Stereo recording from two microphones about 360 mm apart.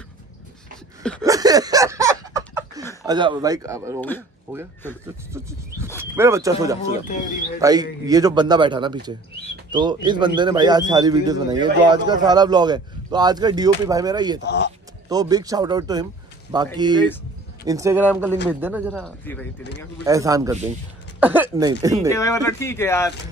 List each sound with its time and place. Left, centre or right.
1.2 s a sound: centre
3.1 s a man's voice: centre
4.0 s speech: centre
5.0 s a man's voice: centre
7.1 s speech: left
7.6 s a man's voice: centre
14.4 s speech: left
15.0 s a man's voice: centre
20.1 s a man's voice: centre
22.1 s speech: centre